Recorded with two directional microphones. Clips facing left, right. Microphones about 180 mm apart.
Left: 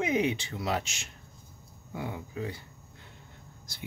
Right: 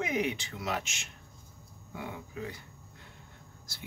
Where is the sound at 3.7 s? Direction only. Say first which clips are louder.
Left 3 dB; 15° left (ahead or behind).